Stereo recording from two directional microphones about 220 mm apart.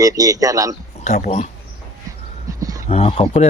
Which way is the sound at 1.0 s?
30° left (ahead or behind).